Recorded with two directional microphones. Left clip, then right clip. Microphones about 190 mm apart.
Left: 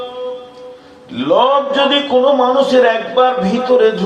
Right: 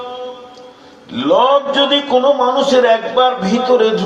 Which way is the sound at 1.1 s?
35° right (ahead or behind).